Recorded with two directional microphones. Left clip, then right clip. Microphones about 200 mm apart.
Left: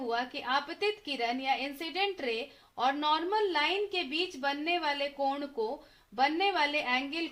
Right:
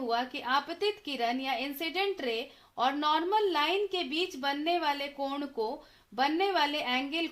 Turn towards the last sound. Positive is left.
turn(degrees=-30)  # may be behind; listen again after turning